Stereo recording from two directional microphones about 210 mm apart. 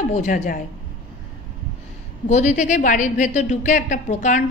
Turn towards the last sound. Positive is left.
turn(degrees=35)  # may be behind; listen again after turning